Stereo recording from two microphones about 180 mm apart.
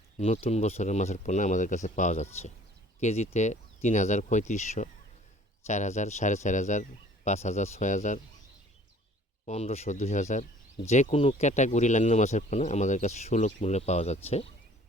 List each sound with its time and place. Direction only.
0.2 s speech: 35° left (ahead or behind)
9.5 s speech: 35° left (ahead or behind)